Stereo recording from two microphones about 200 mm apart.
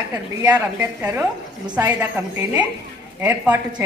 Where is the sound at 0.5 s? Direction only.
10° right (ahead or behind).